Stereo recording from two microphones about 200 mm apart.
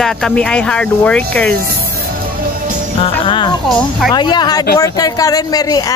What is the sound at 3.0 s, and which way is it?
Music, 25° left (ahead or behind).